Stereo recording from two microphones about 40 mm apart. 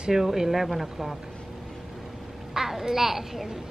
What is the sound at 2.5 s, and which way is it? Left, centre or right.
A child's voice, centre.